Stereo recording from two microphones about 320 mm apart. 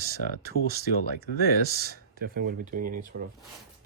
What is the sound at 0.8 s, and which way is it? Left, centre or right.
Speech, left.